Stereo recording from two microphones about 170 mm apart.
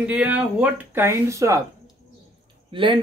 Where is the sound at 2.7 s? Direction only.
30° right (ahead or behind).